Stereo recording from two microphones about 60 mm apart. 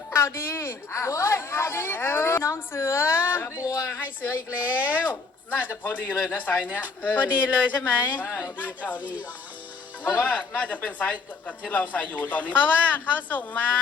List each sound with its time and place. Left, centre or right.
0.1 s speech: left
3.5 s speech: left
3.9 s a woman's voice: left